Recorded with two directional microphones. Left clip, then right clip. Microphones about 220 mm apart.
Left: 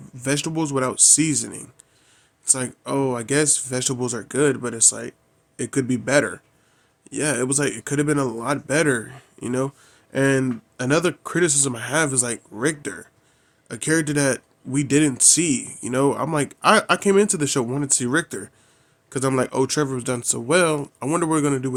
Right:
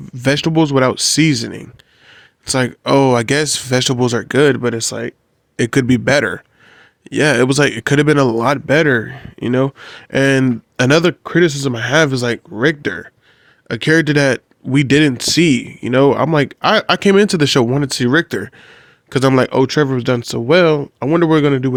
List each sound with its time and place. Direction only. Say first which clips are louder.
0.0 s speech: right 9 dB; 40° right (ahead or behind)